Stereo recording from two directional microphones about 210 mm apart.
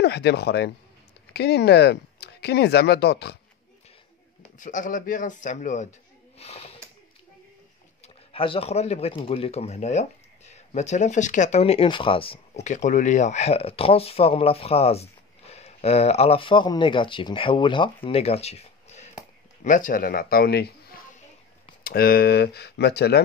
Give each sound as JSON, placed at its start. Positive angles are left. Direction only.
{"t": 0.0, "sound": "speech", "side_deg": 50}
{"t": 4.6, "sound": "a man's voice", "side_deg": 40}
{"t": 8.0, "sound": "speech", "side_deg": 25}
{"t": 12.6, "sound": "speech", "side_deg": 35}
{"t": 21.8, "sound": "speech", "side_deg": 45}